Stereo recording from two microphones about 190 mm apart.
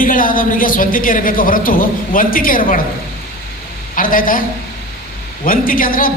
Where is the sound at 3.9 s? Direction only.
45° left (ahead or behind).